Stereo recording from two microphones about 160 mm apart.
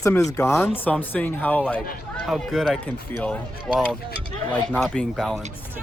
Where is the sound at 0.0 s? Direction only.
20° left (ahead or behind); by 5.4 s 5° left (ahead or behind).